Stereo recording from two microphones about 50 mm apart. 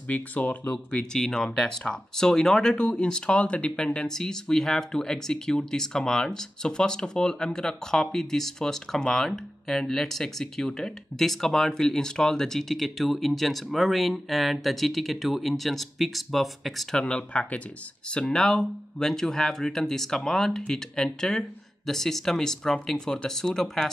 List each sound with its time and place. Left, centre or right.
0.1 s speech: left
1.1 s speech: centre
16.9 s speech: centre
18.1 s speech: centre